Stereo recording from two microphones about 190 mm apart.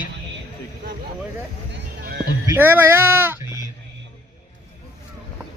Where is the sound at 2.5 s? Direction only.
10° right (ahead or behind).